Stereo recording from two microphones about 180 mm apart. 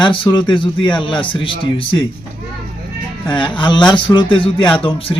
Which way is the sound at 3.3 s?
25° left (ahead or behind).